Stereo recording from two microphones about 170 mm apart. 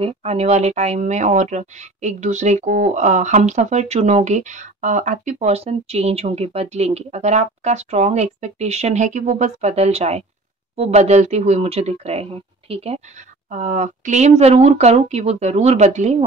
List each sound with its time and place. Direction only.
0.0 s speech: 35° right (ahead or behind)
13.5 s speech: 45° right (ahead or behind)